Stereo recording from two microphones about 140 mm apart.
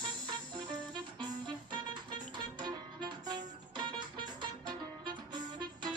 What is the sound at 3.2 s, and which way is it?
Music, 30° right (ahead or behind).